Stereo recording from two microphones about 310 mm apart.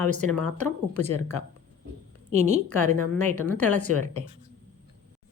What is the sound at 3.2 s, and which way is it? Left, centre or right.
Speech, centre.